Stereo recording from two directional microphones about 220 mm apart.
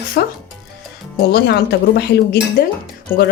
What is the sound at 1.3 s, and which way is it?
A woman's voice, 50° left (ahead or behind).